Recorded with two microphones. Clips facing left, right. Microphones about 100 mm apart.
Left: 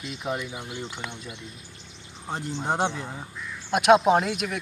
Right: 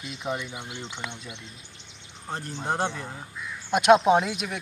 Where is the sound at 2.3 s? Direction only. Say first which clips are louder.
Left 2 dB; 15° left (ahead or behind).